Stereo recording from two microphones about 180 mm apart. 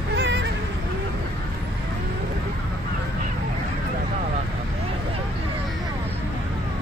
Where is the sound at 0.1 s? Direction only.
75° right (ahead or behind).